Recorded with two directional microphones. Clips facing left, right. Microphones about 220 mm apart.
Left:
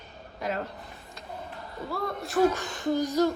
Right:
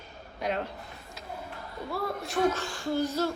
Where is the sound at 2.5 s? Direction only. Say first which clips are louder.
Left 2 dB; 20° left (ahead or behind).